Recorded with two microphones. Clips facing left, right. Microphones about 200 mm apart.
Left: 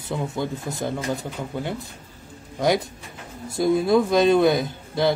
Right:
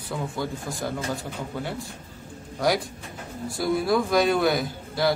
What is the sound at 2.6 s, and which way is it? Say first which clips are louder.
A man's voice: left 3 dB; 20° left (ahead or behind).